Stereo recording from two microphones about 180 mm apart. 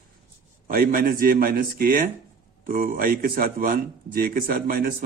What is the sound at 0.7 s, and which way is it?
Speech, 50° right (ahead or behind).